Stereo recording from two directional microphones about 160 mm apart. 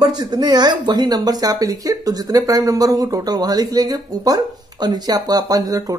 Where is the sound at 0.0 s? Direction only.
25° right (ahead or behind).